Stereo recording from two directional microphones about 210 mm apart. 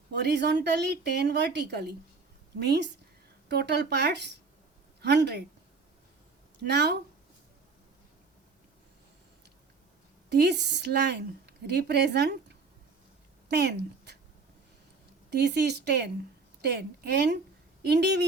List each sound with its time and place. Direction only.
0.1 s a woman's voice: 55° right (ahead or behind)
6.7 s a woman's voice: 55° right (ahead or behind)
10.2 s a woman's voice: 50° right (ahead or behind)
13.5 s speech: 55° right (ahead or behind)
15.3 s a woman's voice: 50° right (ahead or behind)